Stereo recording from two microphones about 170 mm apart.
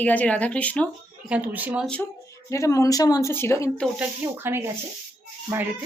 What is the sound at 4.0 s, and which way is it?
Speech, 15° right (ahead or behind).